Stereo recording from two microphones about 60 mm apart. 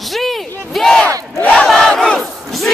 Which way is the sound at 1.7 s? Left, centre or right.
Centre.